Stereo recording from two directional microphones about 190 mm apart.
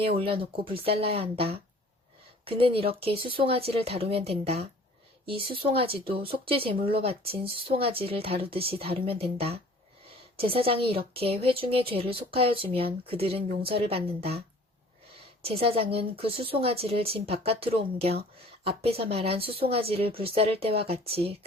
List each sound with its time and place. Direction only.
0.0 s speech: 30° right (ahead or behind)
15.6 s speech: 30° right (ahead or behind)